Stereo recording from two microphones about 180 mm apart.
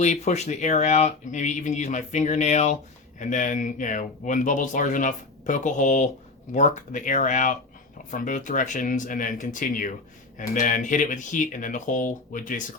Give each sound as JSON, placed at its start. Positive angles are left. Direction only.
{"t": 0.0, "sound": "speech", "side_deg": 40}